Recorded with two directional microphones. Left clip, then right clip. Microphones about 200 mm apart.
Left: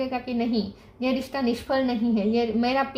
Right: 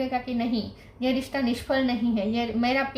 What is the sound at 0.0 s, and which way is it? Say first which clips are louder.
Speech: even; 35° left (ahead or behind).